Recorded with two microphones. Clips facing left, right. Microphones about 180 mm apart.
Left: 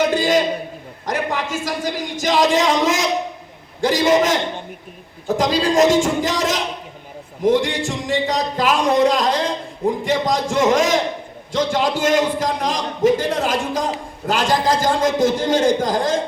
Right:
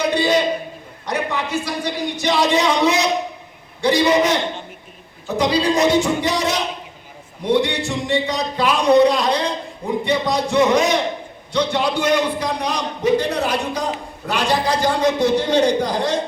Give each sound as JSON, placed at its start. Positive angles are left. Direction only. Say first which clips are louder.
{"t": 0.1, "sound": "a sound", "louder": "left 1 dB", "side_deg": 45}
{"t": 1.0, "sound": "a man's voice", "louder": "left 1 dB", "side_deg": 45}
{"t": 5.4, "sound": "a man's voice", "louder": "left 1 dB", "side_deg": 45}